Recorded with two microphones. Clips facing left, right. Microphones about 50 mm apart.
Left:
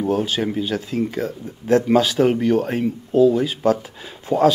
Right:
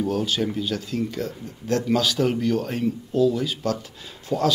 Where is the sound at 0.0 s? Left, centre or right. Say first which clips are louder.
Left 3 dB; left.